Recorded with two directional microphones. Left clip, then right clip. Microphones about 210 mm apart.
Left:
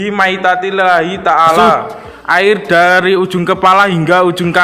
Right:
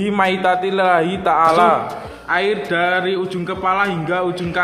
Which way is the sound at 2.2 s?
35° left (ahead or behind).